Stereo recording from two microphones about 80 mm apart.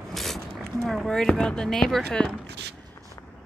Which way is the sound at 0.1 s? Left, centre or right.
Centre.